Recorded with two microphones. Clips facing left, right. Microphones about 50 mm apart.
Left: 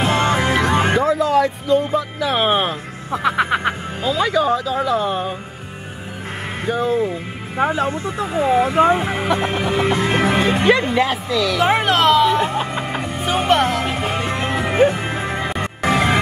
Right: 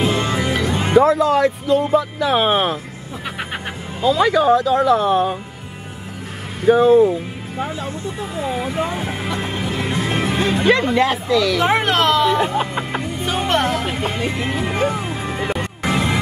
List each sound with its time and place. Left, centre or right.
0.0 s music: left
0.9 s speech: centre
3.1 s music: left
4.0 s speech: centre
6.8 s speech: centre
7.5 s speech: left
8.4 s speech: left
8.6 s speech: left
9.6 s music: left
10.6 s speech: centre
14.1 s speech: left
14.9 s music: left
15.8 s music: left